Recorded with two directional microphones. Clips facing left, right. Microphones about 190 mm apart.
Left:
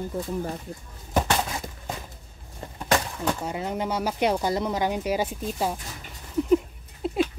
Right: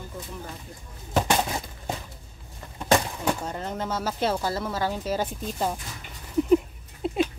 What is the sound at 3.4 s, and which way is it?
Speech, 10° left (ahead or behind).